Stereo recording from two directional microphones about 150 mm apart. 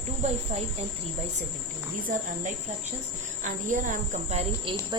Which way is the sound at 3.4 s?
60° right (ahead or behind).